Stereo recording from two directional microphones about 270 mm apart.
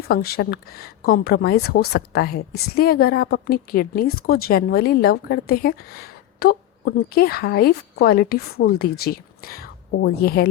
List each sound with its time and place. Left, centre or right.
0.1 s speech: left